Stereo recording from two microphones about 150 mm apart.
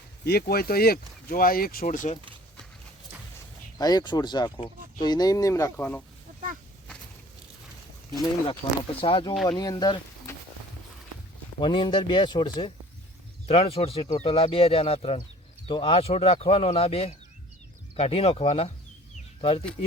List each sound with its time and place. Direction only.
0.3 s speech: 90° left; by 2.1 s 60° left (ahead or behind)
3.8 s speech: 25° left (ahead or behind)
8.2 s speech: 35° left (ahead or behind)
11.6 s speech: 35° left (ahead or behind)
13.5 s speech: 40° left (ahead or behind)